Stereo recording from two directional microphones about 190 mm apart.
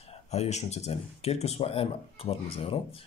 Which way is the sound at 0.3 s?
35° left (ahead or behind).